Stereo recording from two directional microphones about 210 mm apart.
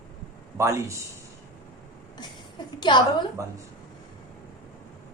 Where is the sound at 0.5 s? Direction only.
10° right (ahead or behind).